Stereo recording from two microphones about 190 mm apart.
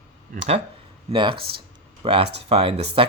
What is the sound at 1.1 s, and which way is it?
Speech, 25° right (ahead or behind).